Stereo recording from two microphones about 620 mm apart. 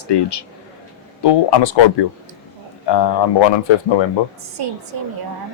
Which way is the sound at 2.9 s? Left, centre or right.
Left.